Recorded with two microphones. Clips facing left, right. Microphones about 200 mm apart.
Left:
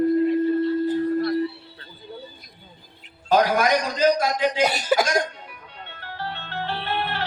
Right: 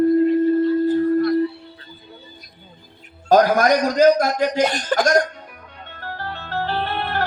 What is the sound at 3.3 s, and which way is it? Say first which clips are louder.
A man's voice: right 4 dB; 45° right (ahead or behind).